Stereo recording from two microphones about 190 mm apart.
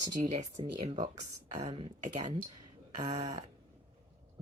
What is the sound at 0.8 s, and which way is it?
Speech, 30° right (ahead or behind).